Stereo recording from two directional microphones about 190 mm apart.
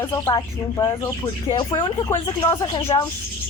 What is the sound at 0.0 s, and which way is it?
Speech, 20° left (ahead or behind).